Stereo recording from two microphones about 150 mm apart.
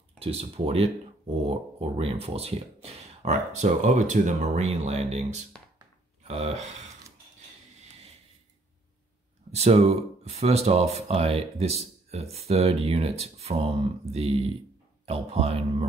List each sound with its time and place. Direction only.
0.2 s speech: 40° right (ahead or behind)
9.5 s speech: 45° right (ahead or behind)